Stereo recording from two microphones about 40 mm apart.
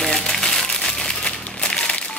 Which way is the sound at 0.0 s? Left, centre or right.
Centre.